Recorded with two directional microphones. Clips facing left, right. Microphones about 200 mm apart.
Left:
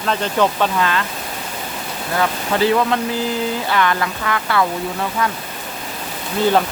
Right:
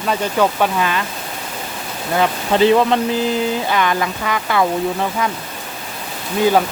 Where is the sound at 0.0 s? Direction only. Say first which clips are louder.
Right 1 dB; 10° right (ahead or behind).